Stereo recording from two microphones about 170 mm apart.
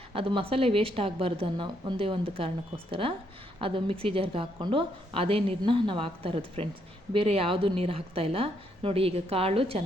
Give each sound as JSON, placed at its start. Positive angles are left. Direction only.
{"t": 0.1, "sound": "speech", "side_deg": -30}